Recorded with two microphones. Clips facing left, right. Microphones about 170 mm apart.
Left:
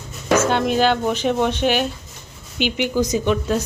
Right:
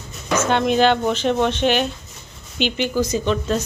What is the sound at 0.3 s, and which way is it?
Speech, 5° left (ahead or behind).